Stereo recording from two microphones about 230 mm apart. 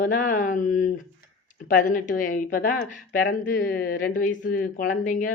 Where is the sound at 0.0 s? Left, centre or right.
Left.